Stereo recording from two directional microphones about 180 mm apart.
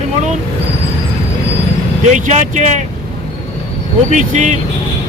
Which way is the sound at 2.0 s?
45° right (ahead or behind).